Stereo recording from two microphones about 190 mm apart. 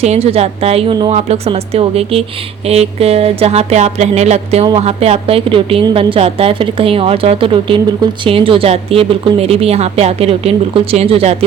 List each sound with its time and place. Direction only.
0.0 s a woman's voice: 35° right (ahead or behind)